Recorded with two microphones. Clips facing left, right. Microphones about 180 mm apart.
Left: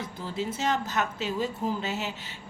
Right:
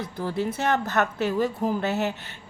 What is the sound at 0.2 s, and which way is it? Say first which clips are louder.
A woman's voice: right 5 dB; 60° right (ahead or behind).